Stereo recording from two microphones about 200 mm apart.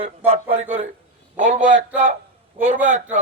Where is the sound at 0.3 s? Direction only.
30° right (ahead or behind).